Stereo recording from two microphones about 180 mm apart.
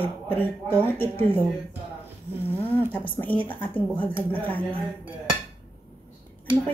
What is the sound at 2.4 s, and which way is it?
A woman's voice, 10° left (ahead or behind).